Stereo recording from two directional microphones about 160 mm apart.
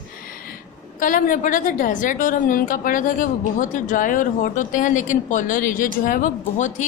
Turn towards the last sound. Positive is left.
turn(degrees=50)  # may be behind; listen again after turning